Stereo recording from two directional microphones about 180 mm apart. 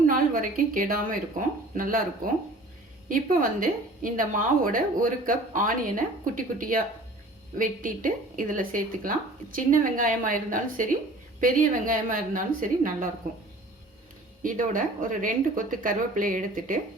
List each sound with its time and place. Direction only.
0.1 s a woman's voice: 50° right (ahead or behind)
14.4 s a woman's voice: 50° right (ahead or behind)